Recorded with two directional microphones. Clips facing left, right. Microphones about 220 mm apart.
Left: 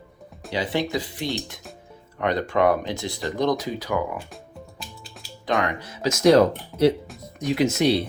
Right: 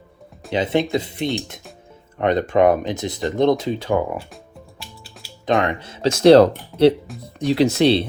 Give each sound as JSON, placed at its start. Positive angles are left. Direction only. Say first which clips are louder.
{"t": 0.5, "sound": "speech", "louder": "right 5 dB", "side_deg": -20}
{"t": 5.5, "sound": "speech", "louder": "right 5 dB", "side_deg": -25}